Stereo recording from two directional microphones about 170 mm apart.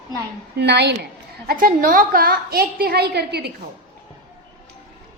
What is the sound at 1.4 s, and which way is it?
A woman's voice, 55° right (ahead or behind).